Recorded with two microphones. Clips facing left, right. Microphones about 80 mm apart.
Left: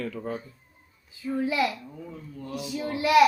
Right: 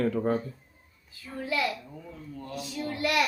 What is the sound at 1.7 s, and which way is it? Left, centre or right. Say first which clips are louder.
Speech: even; centre.